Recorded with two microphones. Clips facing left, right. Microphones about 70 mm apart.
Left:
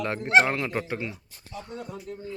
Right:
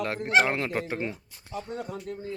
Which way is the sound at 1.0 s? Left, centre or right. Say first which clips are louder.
Right 2 dB; right.